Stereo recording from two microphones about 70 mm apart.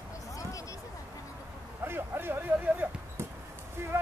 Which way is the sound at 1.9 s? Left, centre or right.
Right.